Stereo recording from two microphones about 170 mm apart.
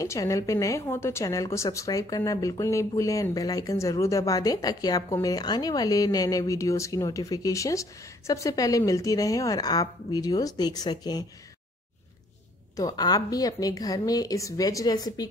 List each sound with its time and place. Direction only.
0.0 s speech: 20° left (ahead or behind)
12.7 s speech: 20° left (ahead or behind)